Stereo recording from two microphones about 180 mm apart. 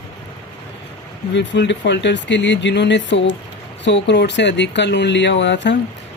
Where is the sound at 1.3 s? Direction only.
80° left.